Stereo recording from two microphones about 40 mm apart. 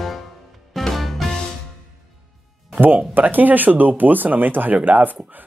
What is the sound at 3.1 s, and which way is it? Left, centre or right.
Speech, right.